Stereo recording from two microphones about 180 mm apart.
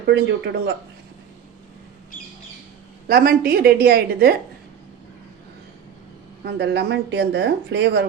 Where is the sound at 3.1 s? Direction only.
55° right (ahead or behind).